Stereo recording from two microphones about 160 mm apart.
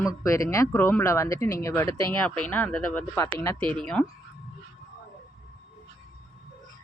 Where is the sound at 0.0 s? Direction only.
20° left (ahead or behind).